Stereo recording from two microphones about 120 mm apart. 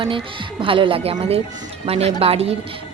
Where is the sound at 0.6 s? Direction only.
45° right (ahead or behind).